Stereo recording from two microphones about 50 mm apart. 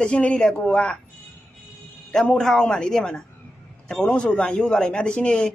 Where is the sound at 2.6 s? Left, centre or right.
Centre.